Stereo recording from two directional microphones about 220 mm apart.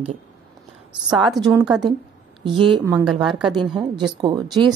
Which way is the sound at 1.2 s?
Centre (ahead or behind).